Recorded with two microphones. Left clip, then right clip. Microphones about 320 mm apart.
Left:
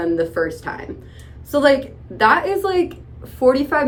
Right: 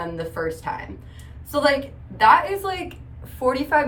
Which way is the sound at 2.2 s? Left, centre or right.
Centre.